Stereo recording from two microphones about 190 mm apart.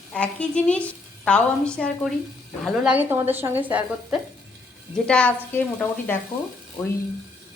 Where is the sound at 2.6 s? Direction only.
5° right (ahead or behind).